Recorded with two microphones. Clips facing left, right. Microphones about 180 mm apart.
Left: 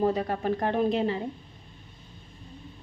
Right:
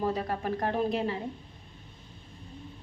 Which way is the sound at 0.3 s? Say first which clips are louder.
Left 3 dB; 20° left (ahead or behind).